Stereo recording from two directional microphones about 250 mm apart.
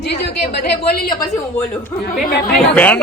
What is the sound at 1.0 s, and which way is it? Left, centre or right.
Speech, centre.